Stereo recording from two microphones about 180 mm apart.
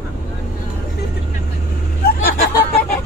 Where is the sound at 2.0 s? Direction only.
60° left (ahead or behind).